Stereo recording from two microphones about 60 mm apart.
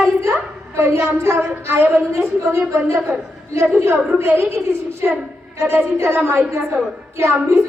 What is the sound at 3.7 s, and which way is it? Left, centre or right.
Speech, right.